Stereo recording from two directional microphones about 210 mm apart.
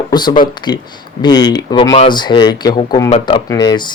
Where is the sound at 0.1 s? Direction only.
20° left (ahead or behind).